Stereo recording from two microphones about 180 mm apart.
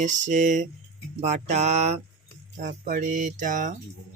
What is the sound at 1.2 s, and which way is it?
Speech, 40° right (ahead or behind).